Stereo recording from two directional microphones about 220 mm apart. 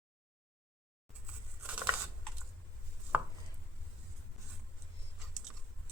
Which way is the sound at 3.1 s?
5° right (ahead or behind).